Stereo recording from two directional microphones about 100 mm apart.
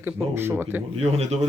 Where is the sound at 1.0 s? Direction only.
90° right.